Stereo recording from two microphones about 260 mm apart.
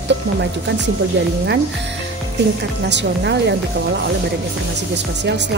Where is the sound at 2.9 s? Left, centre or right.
Right.